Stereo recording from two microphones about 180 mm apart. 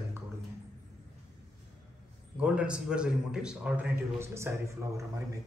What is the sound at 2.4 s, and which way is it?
A man's voice, 5° right (ahead or behind).